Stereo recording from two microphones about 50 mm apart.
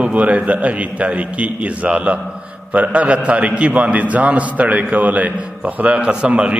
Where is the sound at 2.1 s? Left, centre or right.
Centre.